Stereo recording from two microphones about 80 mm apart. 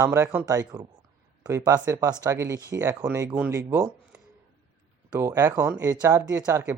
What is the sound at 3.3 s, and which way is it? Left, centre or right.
Speech, right.